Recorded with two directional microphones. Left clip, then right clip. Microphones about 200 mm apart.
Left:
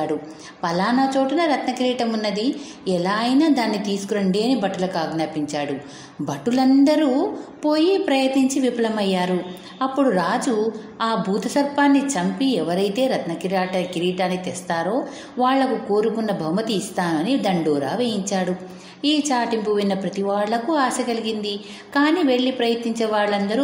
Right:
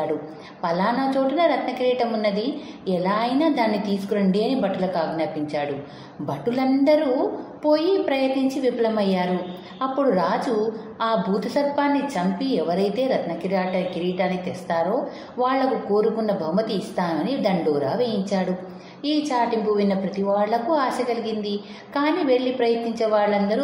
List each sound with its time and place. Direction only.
0.6 s a woman's voice: 35° left (ahead or behind)